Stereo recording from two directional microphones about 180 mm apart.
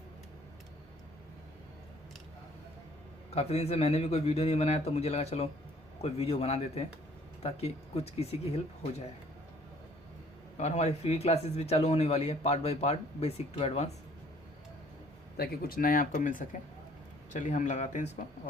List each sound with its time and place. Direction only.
3.3 s a man's voice: 35° left (ahead or behind)
10.6 s a man's voice: 40° left (ahead or behind)
15.4 s speech: 55° left (ahead or behind)